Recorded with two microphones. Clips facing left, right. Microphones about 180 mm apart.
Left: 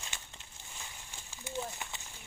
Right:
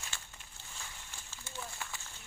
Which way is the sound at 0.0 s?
20° left (ahead or behind).